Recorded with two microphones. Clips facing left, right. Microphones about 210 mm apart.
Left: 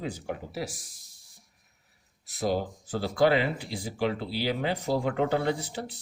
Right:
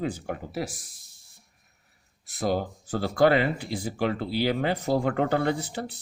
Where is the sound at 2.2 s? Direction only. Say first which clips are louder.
Right 1 dB; 50° right (ahead or behind).